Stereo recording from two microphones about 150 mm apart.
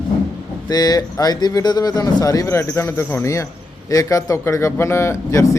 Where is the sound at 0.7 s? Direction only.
25° left (ahead or behind).